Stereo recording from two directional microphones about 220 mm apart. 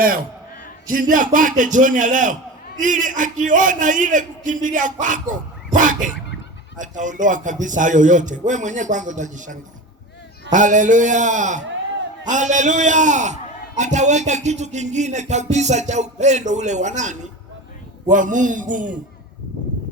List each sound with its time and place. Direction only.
0.0 s a man's voice: 40° right (ahead or behind)